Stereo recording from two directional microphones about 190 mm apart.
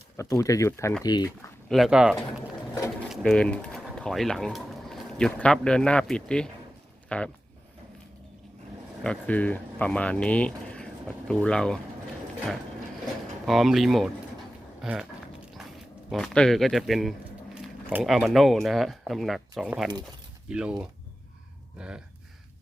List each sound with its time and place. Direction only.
0.2 s speech: 15° left (ahead or behind)
1.7 s speech: centre (ahead or behind)
9.0 s speech: 10° left (ahead or behind)
13.4 s speech: centre (ahead or behind)
14.8 s a sound: centre (ahead or behind)
16.0 s speech: centre (ahead or behind)
21.8 s speech: 5° right (ahead or behind)